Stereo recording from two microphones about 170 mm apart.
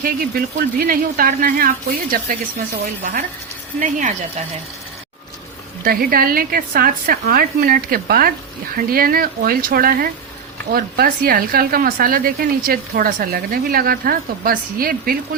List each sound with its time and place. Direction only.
0.0 s a woman's voice: 60° right (ahead or behind)
3.8 s speech: 50° right (ahead or behind)
5.8 s a woman's voice: 60° right (ahead or behind)